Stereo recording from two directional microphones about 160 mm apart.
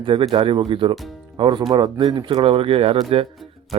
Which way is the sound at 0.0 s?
35° right (ahead or behind).